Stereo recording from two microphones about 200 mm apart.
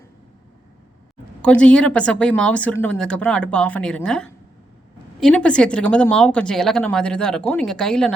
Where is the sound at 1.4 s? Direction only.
5° left (ahead or behind).